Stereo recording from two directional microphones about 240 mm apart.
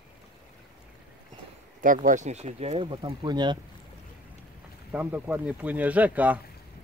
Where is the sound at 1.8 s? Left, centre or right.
Right; by 3.5 s centre.